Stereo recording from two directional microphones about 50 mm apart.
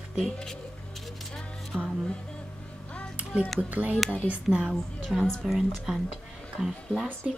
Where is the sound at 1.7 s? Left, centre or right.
Right.